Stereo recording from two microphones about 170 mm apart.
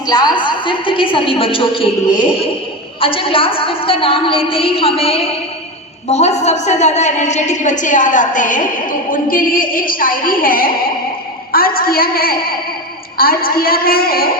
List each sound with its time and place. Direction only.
0.0 s a woman's voice: 25° left (ahead or behind)
3.0 s a woman's voice: 30° left (ahead or behind); by 14.3 s 60° left (ahead or behind)